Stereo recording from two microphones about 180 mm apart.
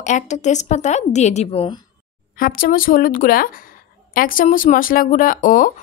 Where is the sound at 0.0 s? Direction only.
40° left (ahead or behind).